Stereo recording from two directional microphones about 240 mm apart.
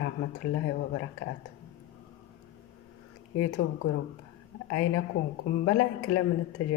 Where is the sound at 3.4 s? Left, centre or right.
Left.